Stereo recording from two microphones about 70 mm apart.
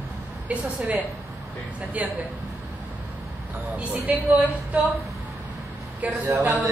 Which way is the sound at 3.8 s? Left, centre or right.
Centre.